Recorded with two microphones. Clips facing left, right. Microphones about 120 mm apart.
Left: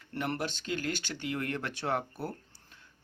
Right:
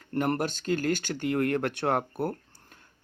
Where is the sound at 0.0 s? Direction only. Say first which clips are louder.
Right 7 dB; 45° right (ahead or behind).